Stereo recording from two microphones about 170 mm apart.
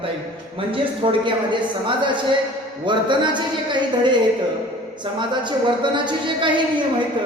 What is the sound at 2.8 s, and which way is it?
A woman's voice, 25° right (ahead or behind).